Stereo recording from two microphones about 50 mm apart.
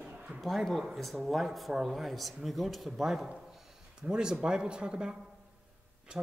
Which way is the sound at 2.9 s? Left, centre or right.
Centre.